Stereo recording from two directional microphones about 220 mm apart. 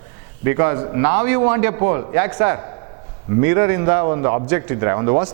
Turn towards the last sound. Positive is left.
turn(degrees=-10)  # may be behind; listen again after turning